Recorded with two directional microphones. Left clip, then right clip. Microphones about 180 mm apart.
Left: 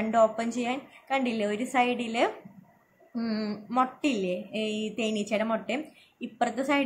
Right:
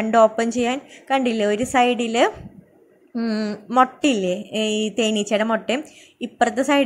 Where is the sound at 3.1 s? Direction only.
25° right (ahead or behind).